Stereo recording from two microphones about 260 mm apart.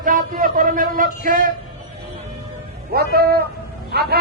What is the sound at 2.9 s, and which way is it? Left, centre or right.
A man's voice, right.